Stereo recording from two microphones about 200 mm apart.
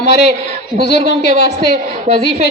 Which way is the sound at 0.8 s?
55° left (ahead or behind).